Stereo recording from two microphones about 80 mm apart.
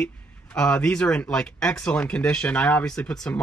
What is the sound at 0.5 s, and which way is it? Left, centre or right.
Speech, centre.